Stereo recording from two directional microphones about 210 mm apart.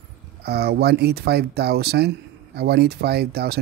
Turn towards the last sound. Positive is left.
turn(degrees=-50)  # may be behind; listen again after turning